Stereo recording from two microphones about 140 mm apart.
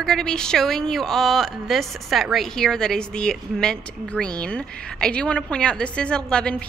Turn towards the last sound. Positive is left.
turn(degrees=5)  # may be behind; listen again after turning